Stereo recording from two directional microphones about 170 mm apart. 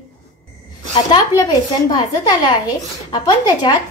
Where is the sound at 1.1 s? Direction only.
25° left (ahead or behind).